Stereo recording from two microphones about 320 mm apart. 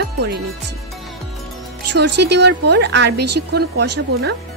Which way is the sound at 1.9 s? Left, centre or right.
Right.